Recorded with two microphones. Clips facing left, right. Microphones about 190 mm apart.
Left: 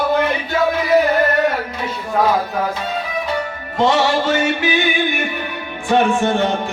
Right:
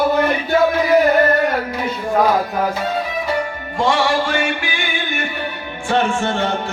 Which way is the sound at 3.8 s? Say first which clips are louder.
Left 2 dB; 20° left (ahead or behind).